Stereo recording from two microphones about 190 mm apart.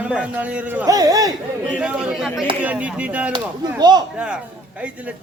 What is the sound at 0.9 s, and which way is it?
Speech, 20° right (ahead or behind).